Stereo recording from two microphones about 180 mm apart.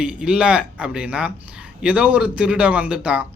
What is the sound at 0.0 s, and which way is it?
A man's voice, 5° right (ahead or behind).